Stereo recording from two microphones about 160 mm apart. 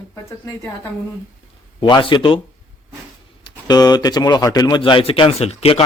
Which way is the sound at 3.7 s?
25° left (ahead or behind).